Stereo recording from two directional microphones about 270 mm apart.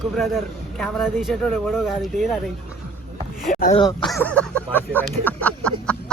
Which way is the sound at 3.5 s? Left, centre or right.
Left.